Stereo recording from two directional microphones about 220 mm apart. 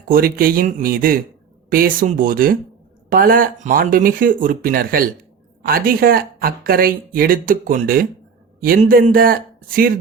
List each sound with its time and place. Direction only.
0.1 s speech: 40° right (ahead or behind)